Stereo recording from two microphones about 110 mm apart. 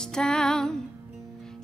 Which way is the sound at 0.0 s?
5° left (ahead or behind).